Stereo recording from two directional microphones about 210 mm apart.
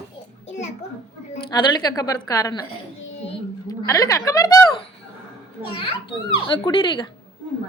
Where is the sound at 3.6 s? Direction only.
15° left (ahead or behind).